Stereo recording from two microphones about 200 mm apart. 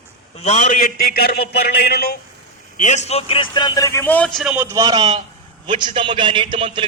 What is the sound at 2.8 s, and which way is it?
A man's voice, 35° left (ahead or behind).